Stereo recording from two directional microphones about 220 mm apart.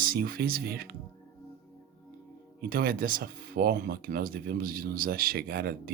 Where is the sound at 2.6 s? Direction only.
45° right (ahead or behind).